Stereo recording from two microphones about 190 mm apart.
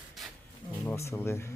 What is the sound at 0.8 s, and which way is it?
Speech, 10° left (ahead or behind).